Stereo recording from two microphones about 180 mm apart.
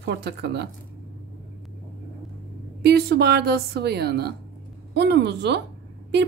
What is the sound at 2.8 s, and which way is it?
A woman's voice, 60° right (ahead or behind).